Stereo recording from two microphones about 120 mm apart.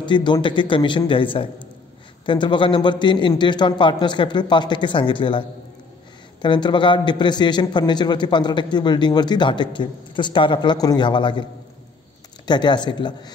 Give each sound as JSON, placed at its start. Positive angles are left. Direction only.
{"t": 0.0, "sound": "a man's voice", "side_deg": 40}
{"t": 6.4, "sound": "a man's voice", "side_deg": 40}
{"t": 12.4, "sound": "a man's voice", "side_deg": 40}